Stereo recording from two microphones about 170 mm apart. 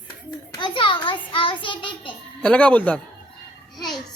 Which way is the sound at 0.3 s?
25° left (ahead or behind).